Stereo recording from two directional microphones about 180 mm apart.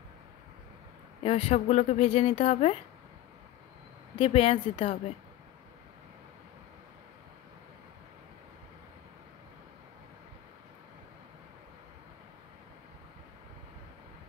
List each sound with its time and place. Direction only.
1.2 s speech: 35° left (ahead or behind)
4.2 s speech: 30° left (ahead or behind)